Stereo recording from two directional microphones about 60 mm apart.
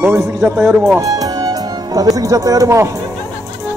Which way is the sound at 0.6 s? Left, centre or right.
Centre.